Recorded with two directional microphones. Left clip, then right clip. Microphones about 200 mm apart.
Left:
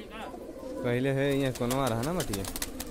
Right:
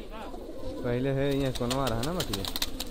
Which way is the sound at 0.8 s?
10° left (ahead or behind).